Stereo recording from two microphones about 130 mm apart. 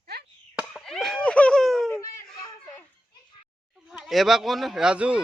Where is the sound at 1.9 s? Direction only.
25° left (ahead or behind).